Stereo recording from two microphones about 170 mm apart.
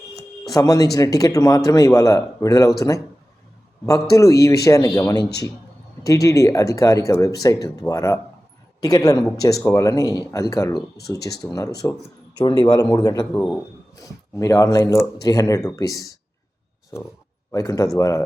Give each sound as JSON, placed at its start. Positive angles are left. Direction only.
{"t": 0.4, "sound": "speech", "side_deg": 20}
{"t": 4.1, "sound": "speech", "side_deg": 20}
{"t": 13.3, "sound": "a man's voice", "side_deg": 5}
{"t": 13.9, "sound": "speech", "side_deg": 20}
{"t": 17.5, "sound": "speech", "side_deg": 20}